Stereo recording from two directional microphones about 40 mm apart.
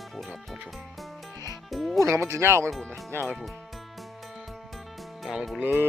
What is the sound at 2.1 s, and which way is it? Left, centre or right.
Speech, right.